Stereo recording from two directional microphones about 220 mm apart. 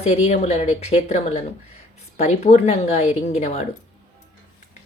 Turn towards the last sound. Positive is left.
turn(degrees=30)  # may be behind; listen again after turning